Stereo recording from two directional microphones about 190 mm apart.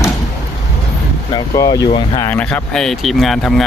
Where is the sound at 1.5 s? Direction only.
15° left (ahead or behind).